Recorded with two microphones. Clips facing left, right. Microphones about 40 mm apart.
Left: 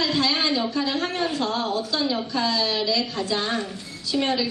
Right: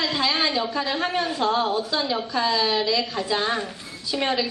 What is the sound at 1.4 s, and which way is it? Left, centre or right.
A woman's voice, centre.